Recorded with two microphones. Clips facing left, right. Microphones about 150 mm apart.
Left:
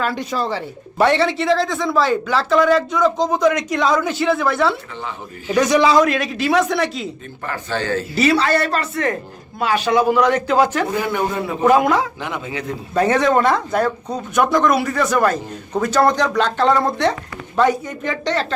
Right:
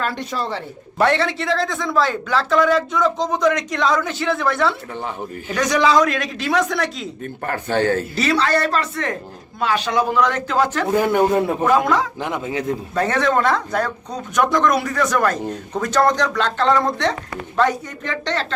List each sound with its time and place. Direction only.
0.0 s speech: centre (ahead or behind)
7.4 s a man's voice: 55° right (ahead or behind)
8.1 s speech: 5° left (ahead or behind)
10.9 s a man's voice: 45° right (ahead or behind)
11.7 s speech: 10° left (ahead or behind)
12.2 s a man's voice: 45° right (ahead or behind)
12.9 s speech: 15° left (ahead or behind)